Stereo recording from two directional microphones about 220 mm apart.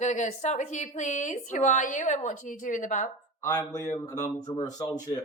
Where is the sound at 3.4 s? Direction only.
15° left (ahead or behind).